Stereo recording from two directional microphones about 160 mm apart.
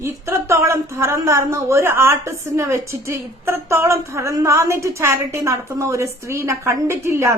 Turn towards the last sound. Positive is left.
turn(degrees=-15)  # may be behind; listen again after turning